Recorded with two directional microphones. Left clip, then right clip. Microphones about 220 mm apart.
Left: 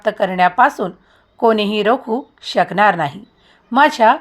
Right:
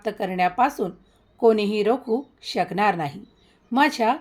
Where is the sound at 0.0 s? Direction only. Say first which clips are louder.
Left 9 dB; 10° left (ahead or behind).